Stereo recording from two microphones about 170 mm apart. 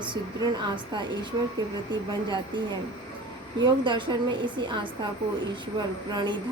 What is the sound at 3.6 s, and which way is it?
Speech, 30° right (ahead or behind).